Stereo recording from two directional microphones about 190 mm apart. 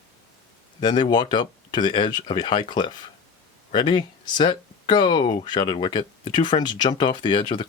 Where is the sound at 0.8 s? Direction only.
25° left (ahead or behind).